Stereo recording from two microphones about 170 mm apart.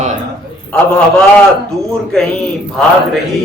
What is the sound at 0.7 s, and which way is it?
Speech, 5° left (ahead or behind).